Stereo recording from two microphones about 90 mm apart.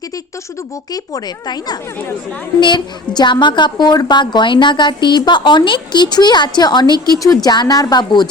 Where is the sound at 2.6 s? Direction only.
60° left (ahead or behind).